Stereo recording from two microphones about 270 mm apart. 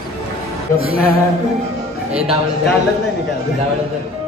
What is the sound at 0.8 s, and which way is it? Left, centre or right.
Music, left.